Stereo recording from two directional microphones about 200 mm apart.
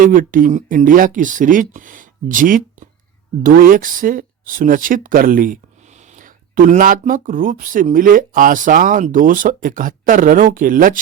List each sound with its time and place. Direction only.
0.0 s speech: 45° right (ahead or behind)